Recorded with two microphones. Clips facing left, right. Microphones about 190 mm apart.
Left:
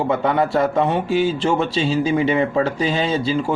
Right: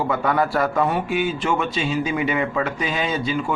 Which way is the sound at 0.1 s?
25° left (ahead or behind).